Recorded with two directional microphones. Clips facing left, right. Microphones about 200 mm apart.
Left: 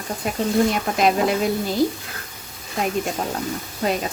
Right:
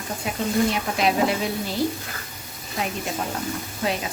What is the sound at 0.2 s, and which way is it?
Speech, 45° left (ahead or behind).